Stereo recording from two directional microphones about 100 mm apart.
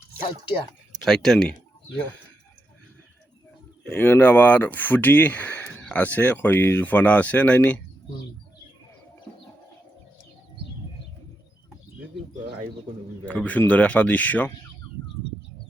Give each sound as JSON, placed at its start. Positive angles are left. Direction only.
{"t": 1.0, "sound": "speech", "side_deg": 5}
{"t": 3.9, "sound": "speech", "side_deg": 20}
{"t": 13.2, "sound": "speech", "side_deg": 15}